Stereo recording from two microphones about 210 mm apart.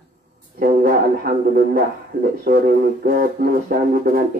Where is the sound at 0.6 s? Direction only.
45° right (ahead or behind).